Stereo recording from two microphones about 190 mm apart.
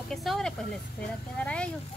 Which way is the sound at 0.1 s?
Centre (ahead or behind).